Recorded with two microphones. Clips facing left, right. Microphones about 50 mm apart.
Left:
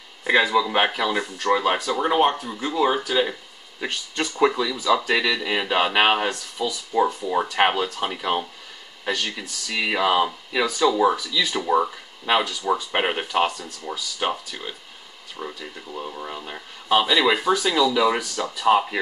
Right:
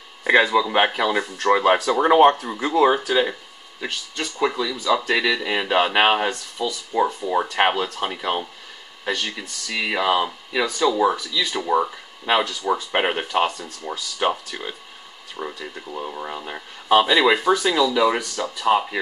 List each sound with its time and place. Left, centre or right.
0.2 s a sound: centre
0.5 s speech: centre
1.5 s speech: centre
3.8 s speech: centre